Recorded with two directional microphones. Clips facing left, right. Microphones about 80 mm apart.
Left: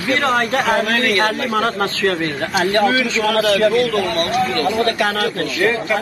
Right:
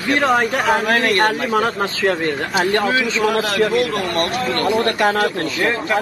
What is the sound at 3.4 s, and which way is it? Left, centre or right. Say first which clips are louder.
Speech: left 3 dB; right.